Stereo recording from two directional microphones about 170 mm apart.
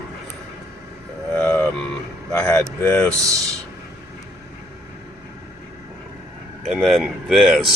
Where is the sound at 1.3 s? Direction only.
10° left (ahead or behind).